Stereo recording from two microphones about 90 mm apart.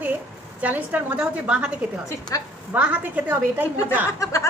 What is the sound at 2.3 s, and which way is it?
Speech, 40° left (ahead or behind).